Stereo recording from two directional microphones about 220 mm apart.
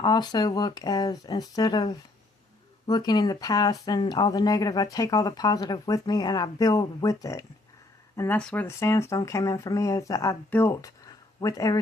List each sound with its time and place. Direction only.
0.0 s speech: 20° left (ahead or behind)